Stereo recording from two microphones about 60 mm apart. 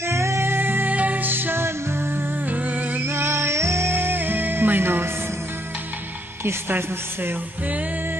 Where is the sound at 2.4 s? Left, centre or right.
Right.